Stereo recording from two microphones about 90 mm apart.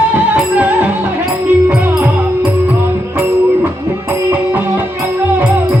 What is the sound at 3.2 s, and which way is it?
Music, 20° right (ahead or behind).